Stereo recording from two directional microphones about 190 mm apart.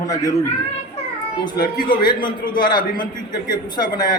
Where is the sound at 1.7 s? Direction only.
50° left (ahead or behind).